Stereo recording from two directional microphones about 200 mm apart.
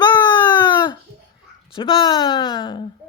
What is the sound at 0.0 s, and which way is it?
Baby cry, 20° left (ahead or behind).